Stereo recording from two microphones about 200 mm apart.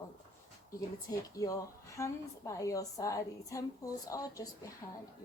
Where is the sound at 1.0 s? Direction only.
15° left (ahead or behind).